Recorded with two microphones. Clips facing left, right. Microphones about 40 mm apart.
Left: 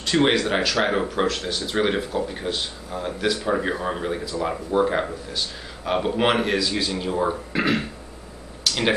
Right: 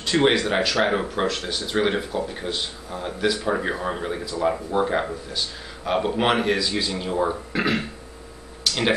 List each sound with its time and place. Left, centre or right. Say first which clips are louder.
0.0 s speech: even; centre
8.6 s tick-tock: even; centre